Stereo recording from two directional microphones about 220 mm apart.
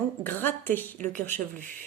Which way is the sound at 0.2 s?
10° left (ahead or behind).